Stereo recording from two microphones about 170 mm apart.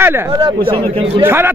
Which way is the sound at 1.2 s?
15° right (ahead or behind).